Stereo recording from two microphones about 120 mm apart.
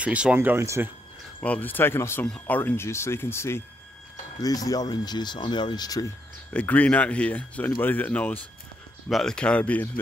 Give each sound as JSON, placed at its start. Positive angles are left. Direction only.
{"t": 0.0, "sound": "speech", "side_deg": -10}
{"t": 1.4, "sound": "speech", "side_deg": 15}
{"t": 2.2, "sound": "speech", "side_deg": 10}
{"t": 4.4, "sound": "speech", "side_deg": 30}
{"t": 6.5, "sound": "speech", "side_deg": 15}